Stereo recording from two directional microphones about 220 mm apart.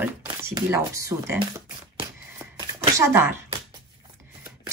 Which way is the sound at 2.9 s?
10° right (ahead or behind).